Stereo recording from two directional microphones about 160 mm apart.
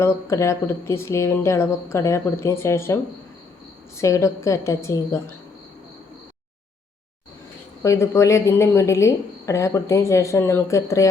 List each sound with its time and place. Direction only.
0.0 s a woman's voice: 15° left (ahead or behind)
7.8 s a woman's voice: 20° left (ahead or behind)